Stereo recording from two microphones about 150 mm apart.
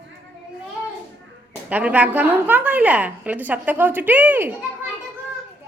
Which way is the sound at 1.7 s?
10° right (ahead or behind).